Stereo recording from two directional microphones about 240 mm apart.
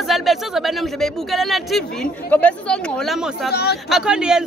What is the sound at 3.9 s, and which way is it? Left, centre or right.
Speech, centre.